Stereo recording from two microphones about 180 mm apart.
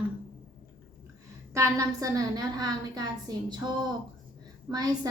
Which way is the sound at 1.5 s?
15° right (ahead or behind).